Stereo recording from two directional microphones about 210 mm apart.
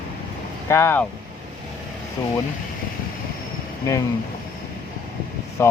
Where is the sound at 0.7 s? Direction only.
10° left (ahead or behind).